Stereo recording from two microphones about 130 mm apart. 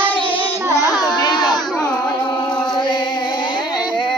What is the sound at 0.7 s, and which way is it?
Child singing, 25° left (ahead or behind).